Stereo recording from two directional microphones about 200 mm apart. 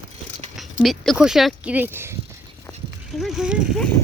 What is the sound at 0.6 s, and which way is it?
Speech, centre (ahead or behind).